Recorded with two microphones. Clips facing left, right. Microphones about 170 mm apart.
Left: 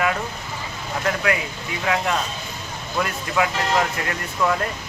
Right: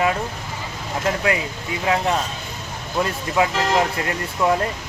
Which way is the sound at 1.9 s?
25° right (ahead or behind).